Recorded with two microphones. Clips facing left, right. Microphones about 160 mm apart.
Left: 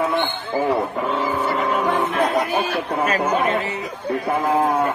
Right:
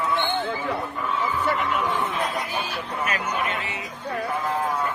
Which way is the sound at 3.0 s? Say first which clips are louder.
Left 7 dB; 30° left (ahead or behind).